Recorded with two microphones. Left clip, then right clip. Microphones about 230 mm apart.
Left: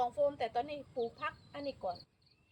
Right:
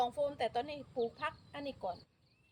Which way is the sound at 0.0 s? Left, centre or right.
Right.